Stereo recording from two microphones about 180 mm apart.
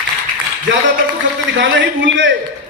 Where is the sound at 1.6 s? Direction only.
90° right.